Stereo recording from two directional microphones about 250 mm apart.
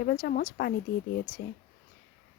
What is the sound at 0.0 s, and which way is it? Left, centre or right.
Speech, left.